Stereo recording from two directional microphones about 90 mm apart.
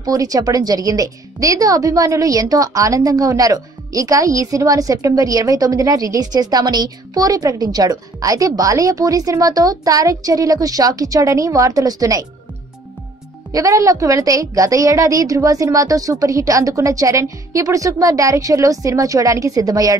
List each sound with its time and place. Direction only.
0.0 s a woman's voice: 40° right (ahead or behind)
13.5 s a woman's voice: 35° right (ahead or behind)